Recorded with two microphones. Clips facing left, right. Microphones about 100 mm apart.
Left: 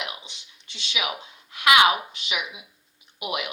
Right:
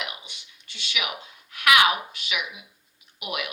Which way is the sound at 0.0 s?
20° left (ahead or behind).